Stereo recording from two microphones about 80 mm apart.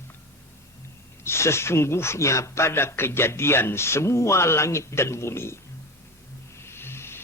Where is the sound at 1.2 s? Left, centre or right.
Left.